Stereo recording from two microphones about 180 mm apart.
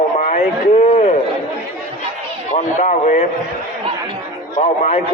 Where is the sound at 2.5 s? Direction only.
45° left (ahead or behind).